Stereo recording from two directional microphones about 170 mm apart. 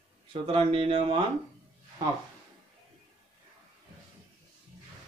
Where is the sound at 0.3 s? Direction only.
35° right (ahead or behind).